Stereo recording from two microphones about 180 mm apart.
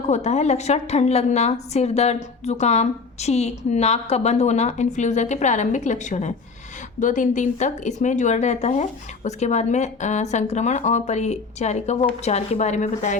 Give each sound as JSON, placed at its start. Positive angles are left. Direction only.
{"t": 0.1, "sound": "a woman's voice", "side_deg": 40}